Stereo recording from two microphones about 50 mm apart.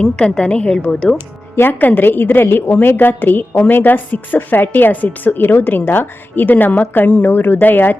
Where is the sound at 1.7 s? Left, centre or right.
Left.